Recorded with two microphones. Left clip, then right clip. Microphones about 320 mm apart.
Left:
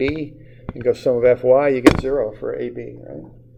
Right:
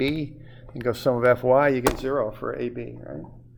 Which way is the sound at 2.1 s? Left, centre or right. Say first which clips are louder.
Left 4 dB; right.